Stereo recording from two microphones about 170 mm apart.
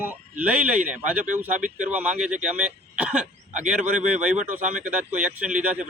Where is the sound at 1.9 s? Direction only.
10° right (ahead or behind).